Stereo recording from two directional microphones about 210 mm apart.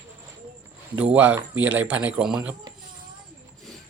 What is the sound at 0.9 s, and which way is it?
Speech, 5° right (ahead or behind).